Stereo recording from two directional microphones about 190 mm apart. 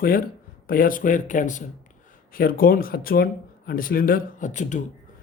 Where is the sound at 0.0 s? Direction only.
50° left (ahead or behind).